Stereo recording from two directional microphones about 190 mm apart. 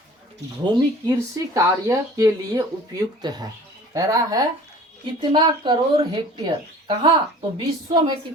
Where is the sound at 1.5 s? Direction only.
20° right (ahead or behind).